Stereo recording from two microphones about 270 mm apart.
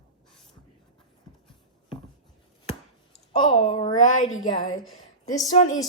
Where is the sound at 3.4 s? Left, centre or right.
Centre.